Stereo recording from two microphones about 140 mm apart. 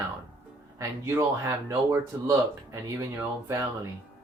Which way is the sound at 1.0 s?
20° right (ahead or behind).